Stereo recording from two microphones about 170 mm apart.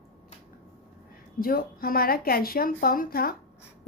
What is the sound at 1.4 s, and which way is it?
A woman's voice, 60° left (ahead or behind).